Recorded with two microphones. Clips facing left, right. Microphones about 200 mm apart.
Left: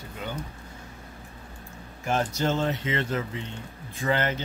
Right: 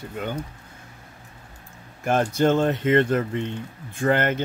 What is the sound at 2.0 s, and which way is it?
Speech, 55° right (ahead or behind).